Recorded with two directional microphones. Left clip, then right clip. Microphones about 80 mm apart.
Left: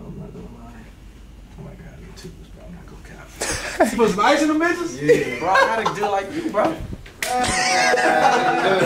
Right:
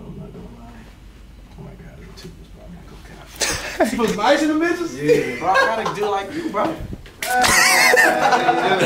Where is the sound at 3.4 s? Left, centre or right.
Centre.